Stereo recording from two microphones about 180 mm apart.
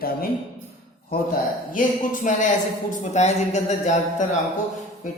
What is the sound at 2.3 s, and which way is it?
A man's voice, 45° left (ahead or behind).